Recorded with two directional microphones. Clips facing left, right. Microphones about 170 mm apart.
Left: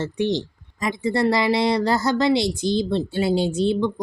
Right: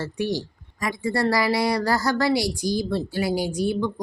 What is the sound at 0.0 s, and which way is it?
Speech, 20° left (ahead or behind).